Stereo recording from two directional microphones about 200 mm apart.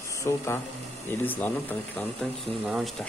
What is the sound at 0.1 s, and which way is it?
Speech, 15° left (ahead or behind).